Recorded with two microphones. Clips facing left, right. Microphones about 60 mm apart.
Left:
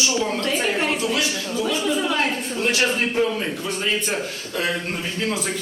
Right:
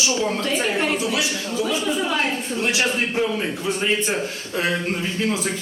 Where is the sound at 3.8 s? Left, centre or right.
Centre.